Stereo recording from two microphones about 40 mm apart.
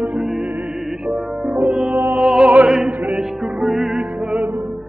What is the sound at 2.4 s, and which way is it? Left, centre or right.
Opera, right.